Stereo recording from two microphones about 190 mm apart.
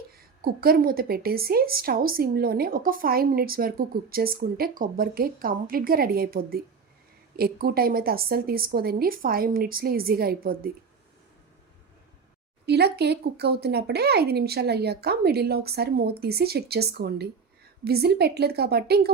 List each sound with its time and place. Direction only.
0.4 s a woman's voice: 50° right (ahead or behind)
12.6 s speech: 60° right (ahead or behind)